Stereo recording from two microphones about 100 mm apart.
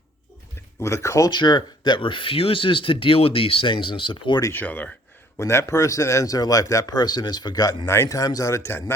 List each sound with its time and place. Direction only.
0.8 s speech: 30° left (ahead or behind)
1.3 s speech: 45° left (ahead or behind)
4.4 s speech: 30° left (ahead or behind)
4.6 s speech: 15° left (ahead or behind)
5.4 s speech: 30° left (ahead or behind)
7.9 s speech: 30° left (ahead or behind)